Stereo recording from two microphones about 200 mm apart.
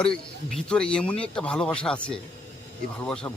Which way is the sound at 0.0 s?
5° left (ahead or behind).